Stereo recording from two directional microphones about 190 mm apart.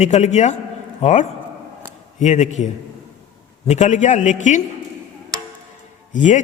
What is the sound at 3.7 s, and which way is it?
Speech, 40° left (ahead or behind).